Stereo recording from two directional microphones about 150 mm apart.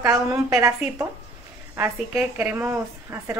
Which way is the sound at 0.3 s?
20° right (ahead or behind).